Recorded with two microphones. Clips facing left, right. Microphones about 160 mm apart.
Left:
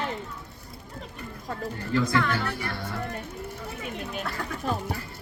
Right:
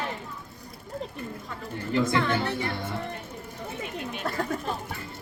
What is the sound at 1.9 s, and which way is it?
Speech, 20° right (ahead or behind).